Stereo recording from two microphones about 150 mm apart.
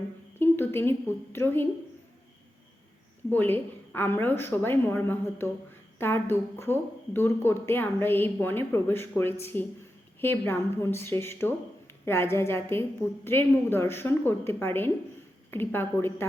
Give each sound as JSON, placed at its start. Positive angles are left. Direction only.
{"t": 0.3, "sound": "a woman's voice", "side_deg": 15}
{"t": 3.2, "sound": "a woman's voice", "side_deg": 15}